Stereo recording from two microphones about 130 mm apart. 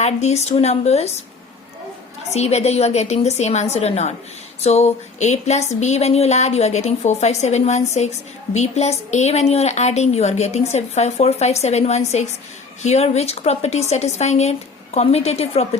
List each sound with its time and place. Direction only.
0.0 s a woman's voice: 60° left (ahead or behind)
2.3 s a woman's voice: 55° left (ahead or behind)